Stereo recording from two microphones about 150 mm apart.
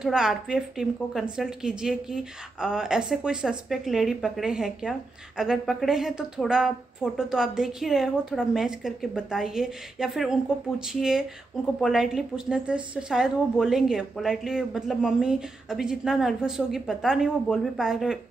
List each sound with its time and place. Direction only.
0.0 s a woman's voice: 5° right (ahead or behind)